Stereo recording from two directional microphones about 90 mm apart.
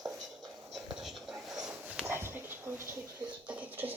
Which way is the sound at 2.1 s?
25° right (ahead or behind).